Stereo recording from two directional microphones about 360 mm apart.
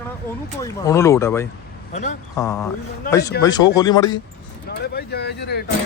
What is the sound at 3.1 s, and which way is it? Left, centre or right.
Speech, left.